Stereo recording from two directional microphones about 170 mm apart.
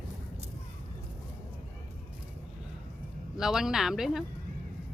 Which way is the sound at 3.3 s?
Centre (ahead or behind).